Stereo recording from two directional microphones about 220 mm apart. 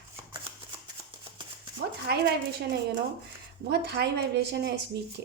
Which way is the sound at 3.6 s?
50° right (ahead or behind).